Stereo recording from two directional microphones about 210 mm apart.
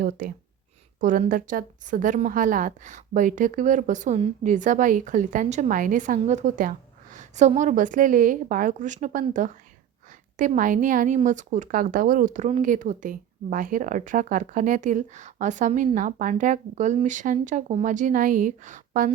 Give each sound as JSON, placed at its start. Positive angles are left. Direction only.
{"t": 0.0, "sound": "a woman's voice", "side_deg": -45}